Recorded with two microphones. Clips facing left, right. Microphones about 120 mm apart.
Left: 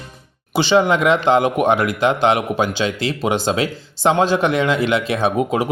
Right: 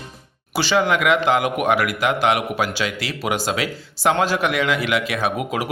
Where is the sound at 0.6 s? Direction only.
20° left (ahead or behind).